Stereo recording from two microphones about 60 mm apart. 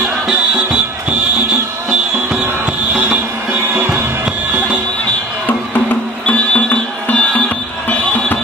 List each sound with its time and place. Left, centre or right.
0.3 s music: centre
3.6 s music: right
6.2 s music: left